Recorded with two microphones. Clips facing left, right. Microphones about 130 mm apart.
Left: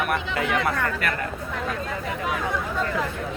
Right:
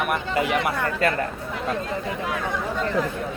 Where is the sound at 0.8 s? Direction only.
30° right (ahead or behind).